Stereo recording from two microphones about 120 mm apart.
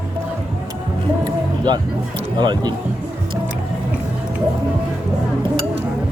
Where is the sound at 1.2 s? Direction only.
35° right (ahead or behind).